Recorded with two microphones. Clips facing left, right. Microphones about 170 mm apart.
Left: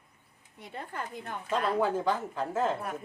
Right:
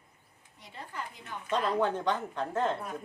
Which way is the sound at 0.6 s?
55° left (ahead or behind).